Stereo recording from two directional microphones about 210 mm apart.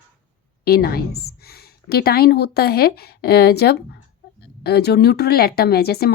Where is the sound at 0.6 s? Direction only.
45° left (ahead or behind).